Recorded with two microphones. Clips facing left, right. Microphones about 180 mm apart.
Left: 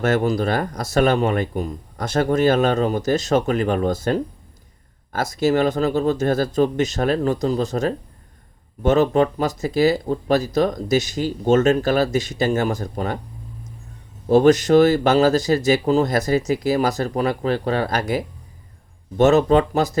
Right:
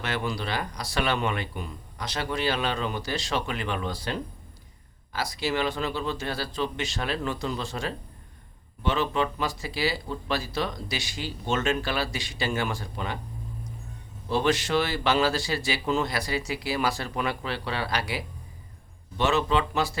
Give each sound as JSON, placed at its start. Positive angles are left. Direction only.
{"t": 0.0, "sound": "speech", "side_deg": 45}
{"t": 14.3, "sound": "speech", "side_deg": 45}